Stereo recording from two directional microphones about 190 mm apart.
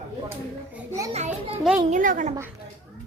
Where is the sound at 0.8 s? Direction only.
15° right (ahead or behind).